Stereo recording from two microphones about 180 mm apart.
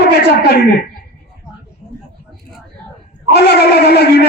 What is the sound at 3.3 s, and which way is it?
Speech, 65° left (ahead or behind).